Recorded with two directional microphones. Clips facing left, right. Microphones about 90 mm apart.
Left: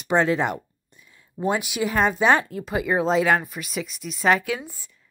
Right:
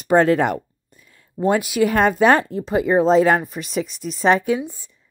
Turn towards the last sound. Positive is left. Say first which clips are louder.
# right 10 dB
turn(degrees=-20)  # may be behind; listen again after turning